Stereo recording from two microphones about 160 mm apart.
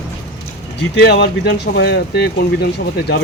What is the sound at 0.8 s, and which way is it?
Speech, 90° left.